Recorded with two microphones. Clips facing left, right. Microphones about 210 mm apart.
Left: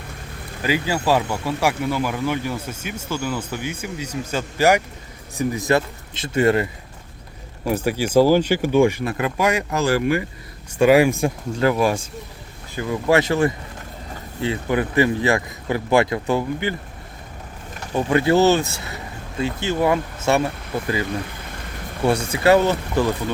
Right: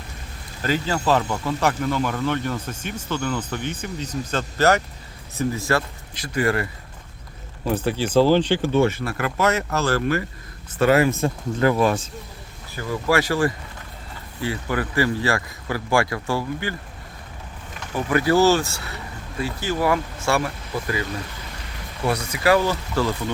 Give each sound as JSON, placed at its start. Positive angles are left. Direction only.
{"t": 0.6, "sound": "speech", "side_deg": 10}
{"t": 7.6, "sound": "speech", "side_deg": 10}
{"t": 12.7, "sound": "speech", "side_deg": 20}
{"t": 17.9, "sound": "speech", "side_deg": 25}
{"t": 22.0, "sound": "speech", "side_deg": 30}